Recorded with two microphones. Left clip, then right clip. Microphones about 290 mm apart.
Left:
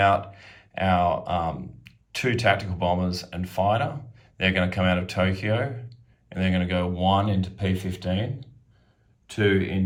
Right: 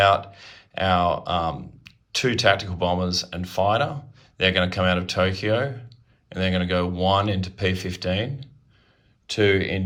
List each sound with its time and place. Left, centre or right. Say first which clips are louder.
0.0 s speech: right 3 dB; centre